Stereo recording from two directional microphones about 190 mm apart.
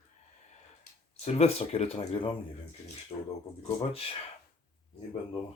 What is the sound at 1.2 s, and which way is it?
Speech, 35° left (ahead or behind).